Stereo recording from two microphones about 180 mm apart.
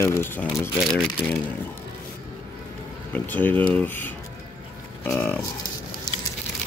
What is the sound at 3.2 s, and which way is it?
Speech, 10° left (ahead or behind).